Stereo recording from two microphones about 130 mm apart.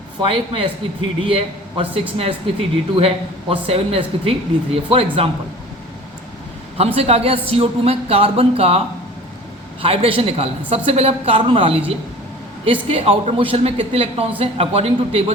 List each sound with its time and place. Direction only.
0.2 s a man's voice: 40° right (ahead or behind)
6.7 s speech: 50° right (ahead or behind)
9.8 s speech: 45° right (ahead or behind)